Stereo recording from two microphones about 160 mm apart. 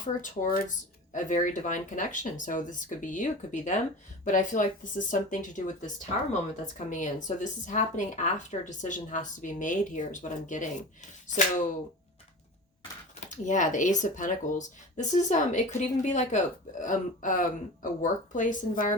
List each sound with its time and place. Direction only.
0.0 s speech: 60° left (ahead or behind)
13.1 s speech: 50° left (ahead or behind)